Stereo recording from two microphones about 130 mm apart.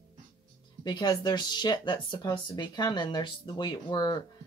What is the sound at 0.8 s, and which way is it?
Speech, 35° left (ahead or behind).